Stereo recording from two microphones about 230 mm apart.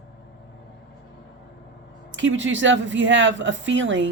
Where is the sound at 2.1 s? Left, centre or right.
Right.